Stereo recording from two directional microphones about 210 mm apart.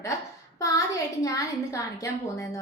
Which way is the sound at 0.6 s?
15° left (ahead or behind).